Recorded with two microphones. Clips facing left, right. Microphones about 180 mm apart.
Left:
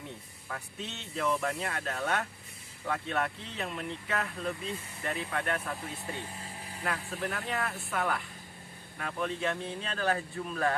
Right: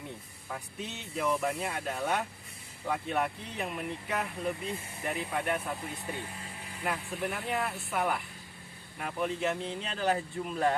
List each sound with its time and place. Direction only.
0.4 s speech: 10° right (ahead or behind)
6.8 s speech: 15° right (ahead or behind)